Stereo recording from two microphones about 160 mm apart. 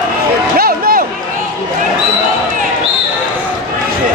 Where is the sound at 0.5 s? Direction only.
65° right (ahead or behind).